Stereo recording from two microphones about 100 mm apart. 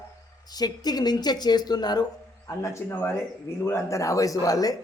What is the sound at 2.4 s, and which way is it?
A man's voice, 30° left (ahead or behind).